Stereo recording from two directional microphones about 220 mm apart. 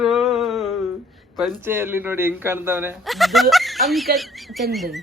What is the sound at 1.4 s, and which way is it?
Speech, 10° right (ahead or behind).